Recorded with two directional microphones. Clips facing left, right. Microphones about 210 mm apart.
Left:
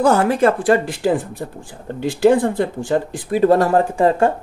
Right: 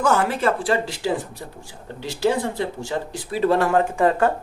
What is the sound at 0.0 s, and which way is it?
Speech, 40° left (ahead or behind).